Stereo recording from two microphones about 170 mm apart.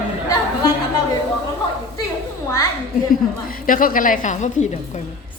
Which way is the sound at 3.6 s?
55° left (ahead or behind).